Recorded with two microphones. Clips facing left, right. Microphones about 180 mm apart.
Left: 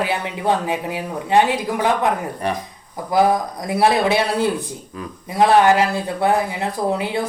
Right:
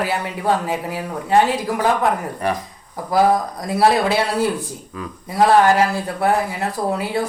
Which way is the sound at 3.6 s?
20° left (ahead or behind).